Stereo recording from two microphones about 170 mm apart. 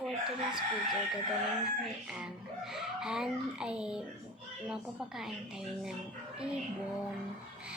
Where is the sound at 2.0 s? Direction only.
5° right (ahead or behind).